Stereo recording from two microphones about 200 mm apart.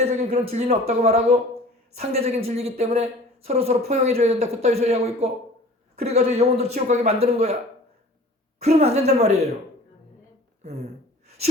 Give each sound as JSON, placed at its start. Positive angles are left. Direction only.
{"t": 0.0, "sound": "speech", "side_deg": -35}
{"t": 8.6, "sound": "speech", "side_deg": -30}
{"t": 10.6, "sound": "speech", "side_deg": -35}